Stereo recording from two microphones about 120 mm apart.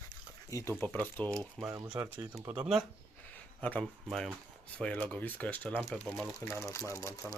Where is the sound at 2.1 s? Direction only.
15° right (ahead or behind).